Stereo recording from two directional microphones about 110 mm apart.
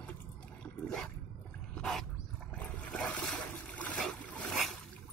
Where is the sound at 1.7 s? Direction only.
5° left (ahead or behind).